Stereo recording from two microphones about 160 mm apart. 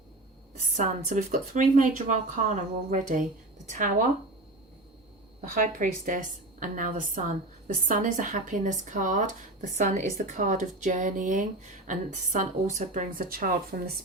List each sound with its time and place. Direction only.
0.8 s a woman's voice: 50° right (ahead or behind)
5.4 s a woman's voice: 55° right (ahead or behind); by 14.0 s 70° right (ahead or behind)